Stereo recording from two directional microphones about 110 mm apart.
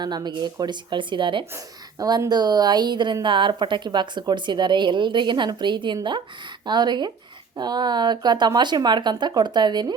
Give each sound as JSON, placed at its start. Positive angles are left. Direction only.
{"t": 0.0, "sound": "a woman's voice", "side_deg": -40}
{"t": 2.0, "sound": "a woman's voice", "side_deg": -35}